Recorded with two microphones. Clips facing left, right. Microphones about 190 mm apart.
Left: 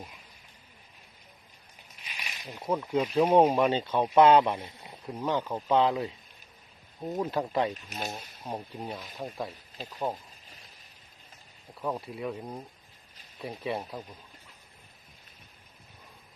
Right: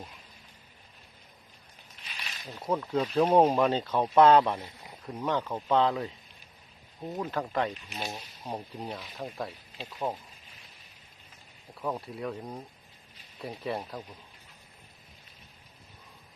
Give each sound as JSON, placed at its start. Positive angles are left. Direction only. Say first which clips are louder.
{"t": 2.0, "sound": "zipper", "louder": "left 1 dB", "side_deg": 15}
{"t": 2.6, "sound": "speech", "louder": "left 1 dB", "side_deg": 5}
{"t": 4.5, "sound": "speech", "louder": "left 1 dB", "side_deg": 25}
{"t": 5.0, "sound": "speech", "louder": "left 1 dB", "side_deg": 5}
{"t": 7.7, "sound": "speech", "louder": "left 1 dB", "side_deg": 45}
{"t": 8.0, "sound": "speech", "louder": "left 1 dB", "side_deg": 0}
{"t": 11.7, "sound": "speech", "louder": "left 1 dB", "side_deg": 0}